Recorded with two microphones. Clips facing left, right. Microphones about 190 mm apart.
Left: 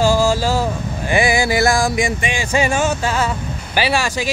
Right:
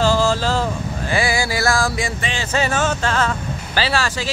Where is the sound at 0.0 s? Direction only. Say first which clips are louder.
Left 2 dB; 10° left (ahead or behind).